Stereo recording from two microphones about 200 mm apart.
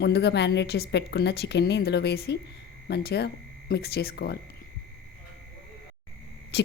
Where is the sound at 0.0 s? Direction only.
60° left (ahead or behind).